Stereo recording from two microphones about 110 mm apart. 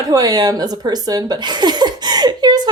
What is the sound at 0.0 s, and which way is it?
A woman's voice, 35° right (ahead or behind).